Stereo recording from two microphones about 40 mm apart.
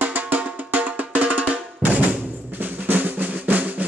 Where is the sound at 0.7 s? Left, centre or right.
Right.